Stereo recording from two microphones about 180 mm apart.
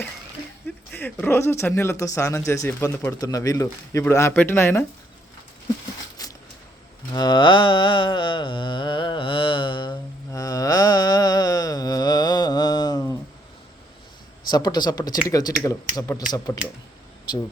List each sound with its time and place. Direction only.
0.9 s speech: 10° left (ahead or behind)
7.1 s mantra: 25° left (ahead or behind)
14.5 s speech: 20° left (ahead or behind)